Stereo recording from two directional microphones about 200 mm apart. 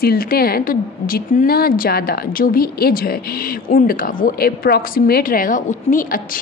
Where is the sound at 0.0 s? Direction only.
50° left (ahead or behind).